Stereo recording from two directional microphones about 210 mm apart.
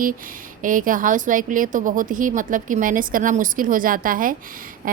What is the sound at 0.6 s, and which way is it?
Speech, 40° right (ahead or behind).